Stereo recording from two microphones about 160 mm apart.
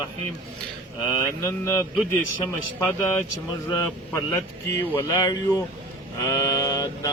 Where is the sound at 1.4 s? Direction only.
15° left (ahead or behind).